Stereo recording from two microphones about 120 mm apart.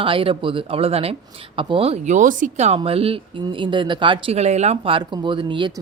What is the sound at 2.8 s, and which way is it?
Speech, 55° right (ahead or behind).